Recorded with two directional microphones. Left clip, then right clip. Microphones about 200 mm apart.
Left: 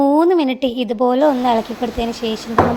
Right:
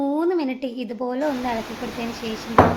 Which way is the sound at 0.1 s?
40° left (ahead or behind).